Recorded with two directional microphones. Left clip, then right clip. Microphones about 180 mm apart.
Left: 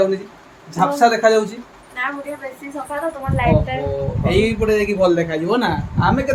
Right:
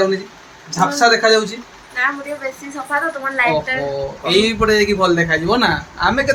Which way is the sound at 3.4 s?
15° left (ahead or behind).